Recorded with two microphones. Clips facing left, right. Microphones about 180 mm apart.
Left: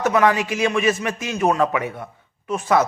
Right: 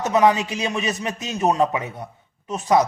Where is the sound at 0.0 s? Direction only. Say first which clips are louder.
Even; 20° right (ahead or behind).